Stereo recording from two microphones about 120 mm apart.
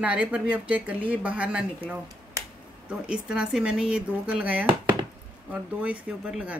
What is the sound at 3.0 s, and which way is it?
Speech, 10° right (ahead or behind).